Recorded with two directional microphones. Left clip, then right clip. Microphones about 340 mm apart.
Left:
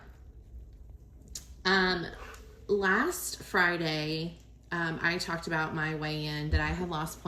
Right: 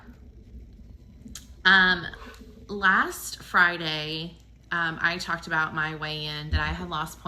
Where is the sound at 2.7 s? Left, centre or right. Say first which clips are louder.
Right 5 dB; centre.